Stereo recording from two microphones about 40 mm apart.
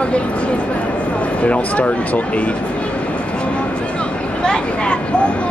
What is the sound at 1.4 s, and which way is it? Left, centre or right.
Speech, left.